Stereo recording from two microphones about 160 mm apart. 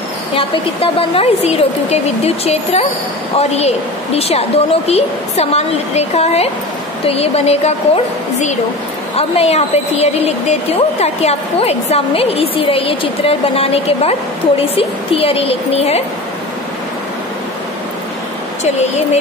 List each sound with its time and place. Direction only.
1.1 s a woman's voice: 40° left (ahead or behind)
18.6 s speech: 45° left (ahead or behind)